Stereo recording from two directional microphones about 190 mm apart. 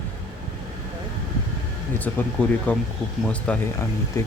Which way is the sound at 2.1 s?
5° left (ahead or behind).